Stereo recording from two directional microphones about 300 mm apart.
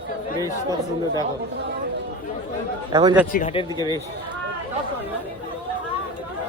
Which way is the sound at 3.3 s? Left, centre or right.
Left.